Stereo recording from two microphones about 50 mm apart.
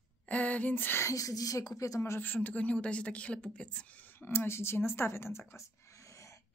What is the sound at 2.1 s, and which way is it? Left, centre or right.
A woman's voice, left.